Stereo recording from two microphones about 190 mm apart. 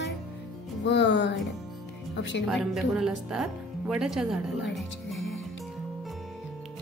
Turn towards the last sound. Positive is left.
turn(degrees=0)  # may be behind; listen again after turning